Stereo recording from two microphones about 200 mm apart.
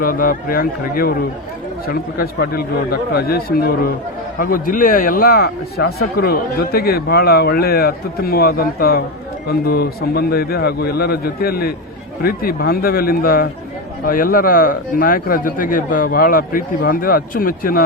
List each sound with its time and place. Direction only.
0.0 s a man's voice: 45° left (ahead or behind)